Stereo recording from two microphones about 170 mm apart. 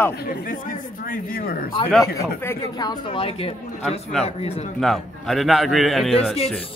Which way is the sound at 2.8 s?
25° left (ahead or behind).